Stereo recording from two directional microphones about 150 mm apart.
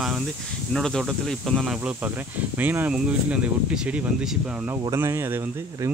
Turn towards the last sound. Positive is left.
turn(degrees=-20)  # may be behind; listen again after turning